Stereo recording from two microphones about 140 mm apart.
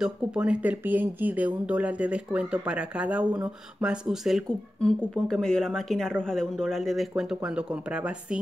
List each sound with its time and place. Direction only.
0.0 s speech: 5° right (ahead or behind)